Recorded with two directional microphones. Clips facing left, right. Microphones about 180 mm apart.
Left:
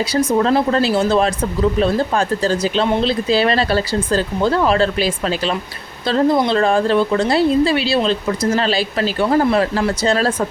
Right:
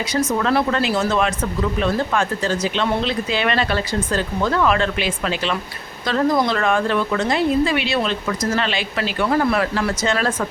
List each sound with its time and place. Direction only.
0.1 s a woman's voice: 30° left (ahead or behind)